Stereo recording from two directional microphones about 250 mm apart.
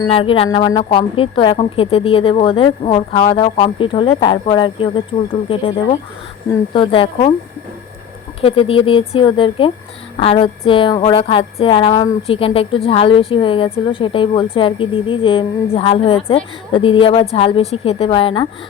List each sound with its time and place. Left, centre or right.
0.1 s a woman's voice: left
8.4 s a woman's voice: left